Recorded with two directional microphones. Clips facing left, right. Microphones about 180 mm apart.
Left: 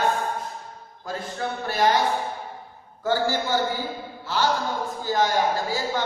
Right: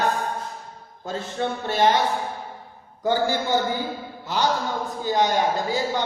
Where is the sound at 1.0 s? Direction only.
25° right (ahead or behind).